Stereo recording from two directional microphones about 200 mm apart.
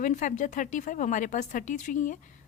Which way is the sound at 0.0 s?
40° left (ahead or behind).